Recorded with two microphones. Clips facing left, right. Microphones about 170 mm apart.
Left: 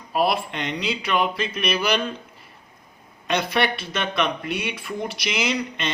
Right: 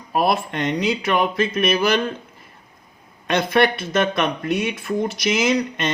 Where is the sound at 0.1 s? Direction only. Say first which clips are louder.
Right 2 dB; 45° right (ahead or behind).